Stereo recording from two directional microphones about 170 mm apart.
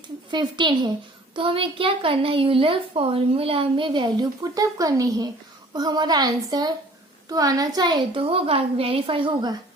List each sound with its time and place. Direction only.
0.3 s a woman's voice: 25° right (ahead or behind)